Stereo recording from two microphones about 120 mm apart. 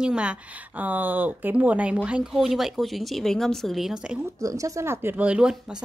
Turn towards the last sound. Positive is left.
turn(degrees=-10)  # may be behind; listen again after turning